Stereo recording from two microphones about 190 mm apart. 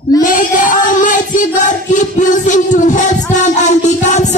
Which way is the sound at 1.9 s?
40° left (ahead or behind).